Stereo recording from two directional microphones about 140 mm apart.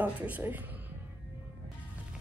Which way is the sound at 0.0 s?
10° right (ahead or behind).